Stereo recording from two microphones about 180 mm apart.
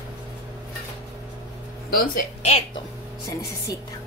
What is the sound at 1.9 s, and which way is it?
Speech, 55° left (ahead or behind).